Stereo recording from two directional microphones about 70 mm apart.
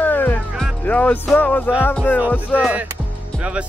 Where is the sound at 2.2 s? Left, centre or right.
Right.